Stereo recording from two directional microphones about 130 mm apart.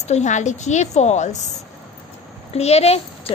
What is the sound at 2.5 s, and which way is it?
Speech, 55° left (ahead or behind).